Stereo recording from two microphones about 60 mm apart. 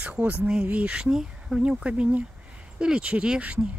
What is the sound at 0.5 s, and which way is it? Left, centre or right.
Speech, right.